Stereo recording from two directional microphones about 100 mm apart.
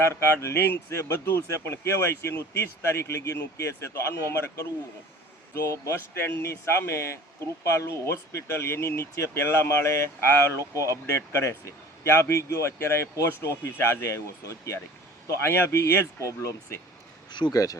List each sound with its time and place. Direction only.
0.0 s speech: 25° left (ahead or behind)
5.5 s speech: 30° left (ahead or behind)